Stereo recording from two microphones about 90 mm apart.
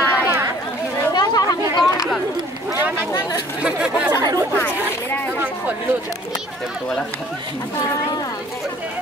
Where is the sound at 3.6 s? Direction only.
15° right (ahead or behind).